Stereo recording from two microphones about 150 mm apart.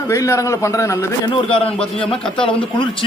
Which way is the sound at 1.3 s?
35° left (ahead or behind).